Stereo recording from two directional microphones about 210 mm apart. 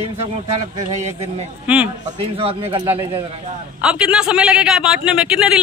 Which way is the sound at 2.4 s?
25° right (ahead or behind).